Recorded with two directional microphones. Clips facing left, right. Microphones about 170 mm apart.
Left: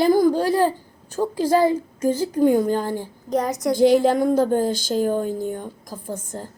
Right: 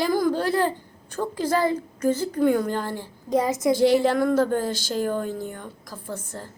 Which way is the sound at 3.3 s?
Centre (ahead or behind).